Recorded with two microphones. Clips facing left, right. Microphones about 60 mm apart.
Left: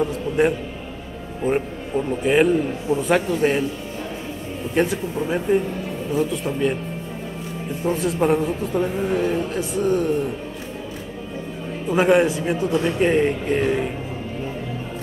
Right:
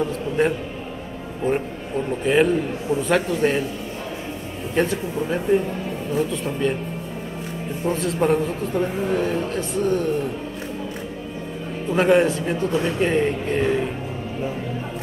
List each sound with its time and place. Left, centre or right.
1.4 s a man's voice: centre
4.7 s a man's voice: centre
7.8 s a man's voice: centre
11.9 s a man's voice: centre